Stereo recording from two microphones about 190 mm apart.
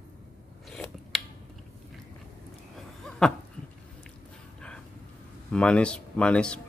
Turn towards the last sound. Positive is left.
turn(degrees=5)  # may be behind; listen again after turning